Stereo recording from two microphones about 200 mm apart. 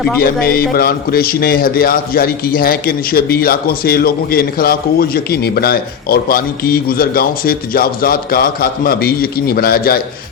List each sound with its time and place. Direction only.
0.4 s a man's voice: 50° left (ahead or behind)